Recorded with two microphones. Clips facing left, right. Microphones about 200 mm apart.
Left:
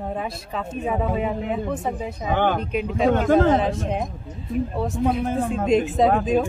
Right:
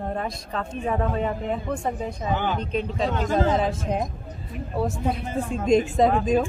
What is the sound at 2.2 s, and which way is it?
Speech, 55° left (ahead or behind).